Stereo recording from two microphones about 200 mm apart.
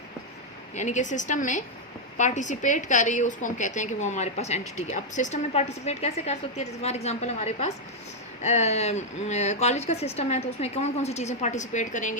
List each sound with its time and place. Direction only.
0.8 s speech: 35° left (ahead or behind)